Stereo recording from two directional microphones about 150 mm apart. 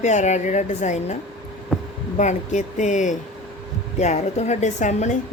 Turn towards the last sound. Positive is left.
turn(degrees=55)  # may be behind; listen again after turning